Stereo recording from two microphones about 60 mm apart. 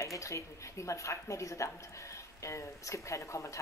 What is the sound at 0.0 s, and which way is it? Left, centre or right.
A woman's voice, left.